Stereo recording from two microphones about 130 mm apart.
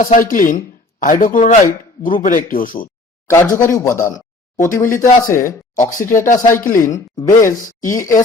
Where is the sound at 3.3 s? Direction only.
25° left (ahead or behind).